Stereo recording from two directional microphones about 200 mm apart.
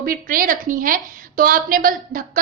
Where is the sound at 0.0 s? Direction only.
45° right (ahead or behind).